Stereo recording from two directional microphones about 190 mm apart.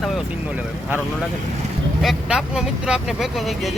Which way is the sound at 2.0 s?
Centre (ahead or behind).